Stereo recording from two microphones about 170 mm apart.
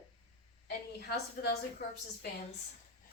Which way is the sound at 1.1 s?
65° left (ahead or behind).